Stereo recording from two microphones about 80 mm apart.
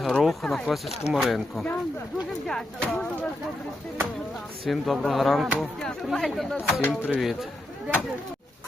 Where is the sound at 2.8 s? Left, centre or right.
Centre.